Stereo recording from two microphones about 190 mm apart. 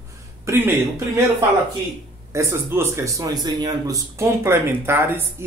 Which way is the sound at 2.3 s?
15° right (ahead or behind).